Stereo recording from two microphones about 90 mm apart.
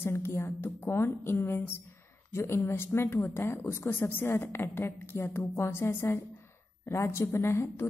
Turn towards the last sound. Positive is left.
turn(degrees=30)  # may be behind; listen again after turning